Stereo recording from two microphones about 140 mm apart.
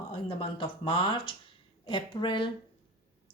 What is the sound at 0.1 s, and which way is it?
A woman's voice, 40° left (ahead or behind).